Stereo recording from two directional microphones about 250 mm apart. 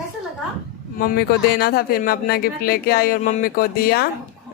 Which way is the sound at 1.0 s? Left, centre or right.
Left.